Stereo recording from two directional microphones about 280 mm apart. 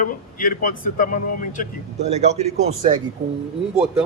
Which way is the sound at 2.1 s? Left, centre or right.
Right.